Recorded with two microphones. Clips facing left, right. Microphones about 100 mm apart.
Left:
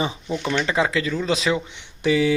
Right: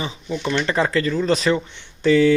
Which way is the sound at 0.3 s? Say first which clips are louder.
Right 1 dB; 5° left (ahead or behind).